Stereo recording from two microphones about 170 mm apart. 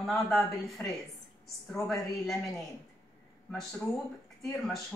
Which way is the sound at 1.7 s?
Centre (ahead or behind).